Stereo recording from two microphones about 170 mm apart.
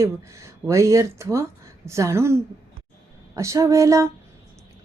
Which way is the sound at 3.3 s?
20° right (ahead or behind).